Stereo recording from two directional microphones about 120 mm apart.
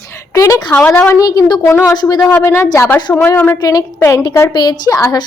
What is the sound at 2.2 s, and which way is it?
A woman's voice, 15° left (ahead or behind).